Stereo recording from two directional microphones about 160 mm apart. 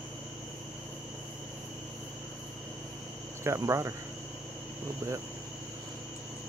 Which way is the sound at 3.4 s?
20° right (ahead or behind).